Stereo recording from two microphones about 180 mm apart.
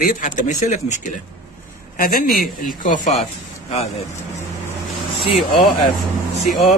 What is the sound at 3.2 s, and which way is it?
Speech, 40° left (ahead or behind).